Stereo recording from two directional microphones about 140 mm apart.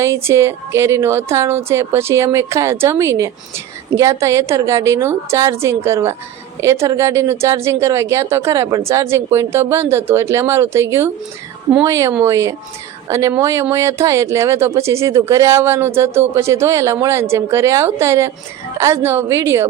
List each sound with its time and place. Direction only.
0.0 s a woman's voice: 20° right (ahead or behind)